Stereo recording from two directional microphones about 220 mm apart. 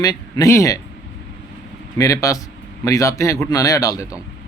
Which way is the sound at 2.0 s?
15° left (ahead or behind).